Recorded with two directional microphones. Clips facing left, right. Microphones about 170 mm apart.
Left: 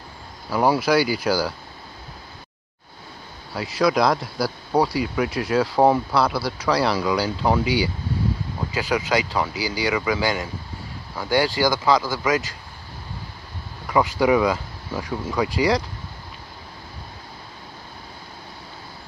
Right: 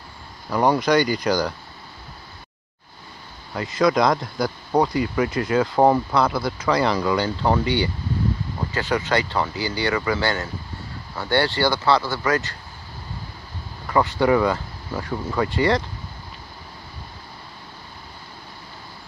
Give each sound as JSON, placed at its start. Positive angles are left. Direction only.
{"t": 0.5, "sound": "speech", "side_deg": 5}
{"t": 3.5, "sound": "speech", "side_deg": 5}
{"t": 14.1, "sound": "speech", "side_deg": 10}